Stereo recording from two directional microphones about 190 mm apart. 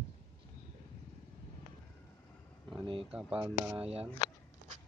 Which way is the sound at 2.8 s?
25° right (ahead or behind).